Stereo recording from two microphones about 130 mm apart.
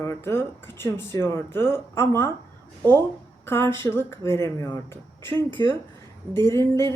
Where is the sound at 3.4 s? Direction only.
20° left (ahead or behind).